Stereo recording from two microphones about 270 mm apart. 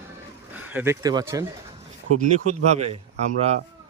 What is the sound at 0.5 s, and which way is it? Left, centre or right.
Speech, centre.